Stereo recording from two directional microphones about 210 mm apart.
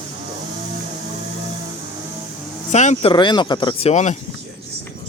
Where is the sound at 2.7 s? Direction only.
35° left (ahead or behind).